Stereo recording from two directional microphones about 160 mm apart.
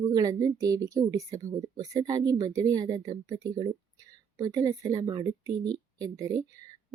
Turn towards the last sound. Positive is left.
turn(degrees=-20)  # may be behind; listen again after turning